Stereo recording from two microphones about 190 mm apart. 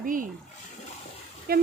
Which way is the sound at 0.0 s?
45° right (ahead or behind).